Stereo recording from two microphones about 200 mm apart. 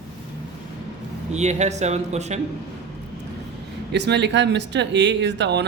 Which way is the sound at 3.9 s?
60° right (ahead or behind).